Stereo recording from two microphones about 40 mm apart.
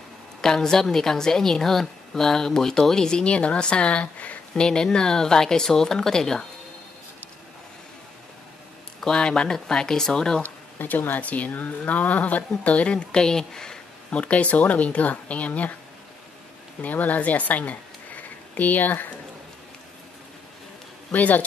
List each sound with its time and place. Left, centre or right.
0.4 s a woman's voice: centre
3.3 s speech: left
4.6 s a woman's voice: centre
9.0 s a woman's voice: centre
10.8 s speech: left
13.1 s a woman's voice: centre
14.1 s speech: left
16.8 s speech: left
21.1 s speech: left